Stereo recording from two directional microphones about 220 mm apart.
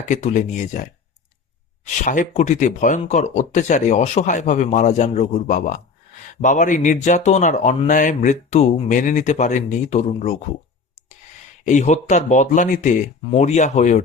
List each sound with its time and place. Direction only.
0.1 s speech: 35° left (ahead or behind)
11.6 s speech: 35° left (ahead or behind)